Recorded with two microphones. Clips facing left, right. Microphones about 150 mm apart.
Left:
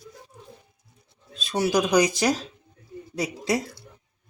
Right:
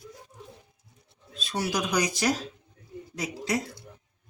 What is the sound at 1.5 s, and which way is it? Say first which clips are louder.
Speech: left 7 dB; 30° left (ahead or behind).